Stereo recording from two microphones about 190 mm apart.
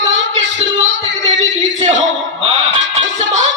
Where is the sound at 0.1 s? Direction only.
75° right (ahead or behind).